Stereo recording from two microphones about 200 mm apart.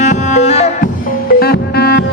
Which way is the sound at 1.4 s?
50° left (ahead or behind).